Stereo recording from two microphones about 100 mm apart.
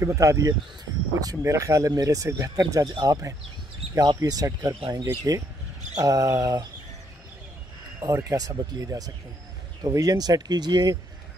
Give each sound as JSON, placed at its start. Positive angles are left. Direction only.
{"t": 0.0, "sound": "speech", "side_deg": -30}
{"t": 8.0, "sound": "speech", "side_deg": -35}